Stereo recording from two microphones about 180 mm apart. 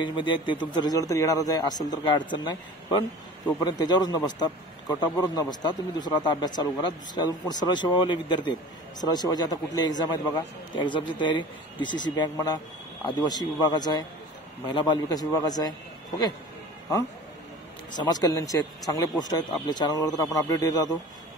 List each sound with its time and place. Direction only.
0.0 s speech: 25° left (ahead or behind)
17.9 s speech: 20° left (ahead or behind)